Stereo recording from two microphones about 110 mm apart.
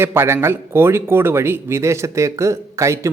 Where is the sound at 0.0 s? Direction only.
20° right (ahead or behind).